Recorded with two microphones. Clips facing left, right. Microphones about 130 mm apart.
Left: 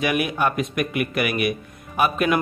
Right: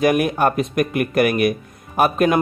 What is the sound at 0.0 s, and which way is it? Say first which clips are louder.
A man's voice: right 5 dB; 40° right (ahead or behind).